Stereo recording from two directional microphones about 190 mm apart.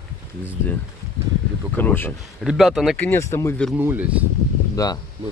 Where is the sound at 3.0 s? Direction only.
10° left (ahead or behind).